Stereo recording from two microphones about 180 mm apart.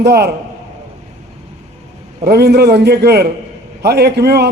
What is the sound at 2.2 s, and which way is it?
Speech, 60° right (ahead or behind).